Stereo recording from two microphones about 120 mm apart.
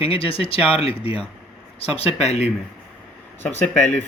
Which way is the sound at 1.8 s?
55° left (ahead or behind).